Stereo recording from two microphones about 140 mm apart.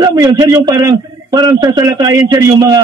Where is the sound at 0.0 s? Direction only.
25° right (ahead or behind).